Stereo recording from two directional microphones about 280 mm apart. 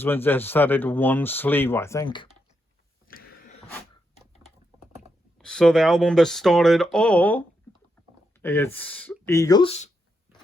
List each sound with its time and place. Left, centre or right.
0.0 s speech: centre
3.1 s a sound: left
5.4 s speech: centre; by 9.9 s left